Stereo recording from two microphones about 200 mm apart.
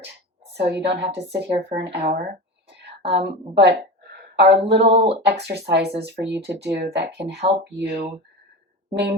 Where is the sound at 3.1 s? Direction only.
60° right (ahead or behind).